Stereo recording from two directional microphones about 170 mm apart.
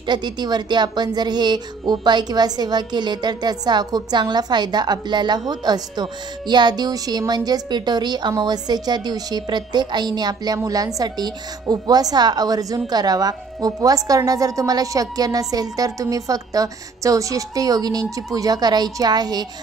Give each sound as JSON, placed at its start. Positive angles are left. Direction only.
{"t": 0.0, "sound": "speech", "side_deg": -25}